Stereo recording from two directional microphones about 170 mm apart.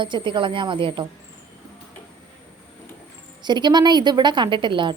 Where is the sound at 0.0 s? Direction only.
30° right (ahead or behind).